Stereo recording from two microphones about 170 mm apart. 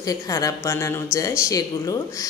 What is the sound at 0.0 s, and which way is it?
A woman's voice, 20° left (ahead or behind).